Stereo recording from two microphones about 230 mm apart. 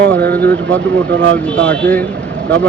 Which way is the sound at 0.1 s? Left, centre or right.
Right.